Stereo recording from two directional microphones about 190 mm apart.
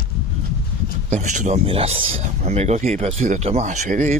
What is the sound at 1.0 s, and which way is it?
Speech, 40° right (ahead or behind).